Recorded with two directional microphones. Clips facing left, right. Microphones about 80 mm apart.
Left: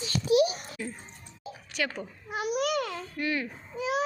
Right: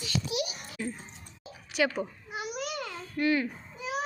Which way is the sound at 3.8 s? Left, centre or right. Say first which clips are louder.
Left 5 dB; left.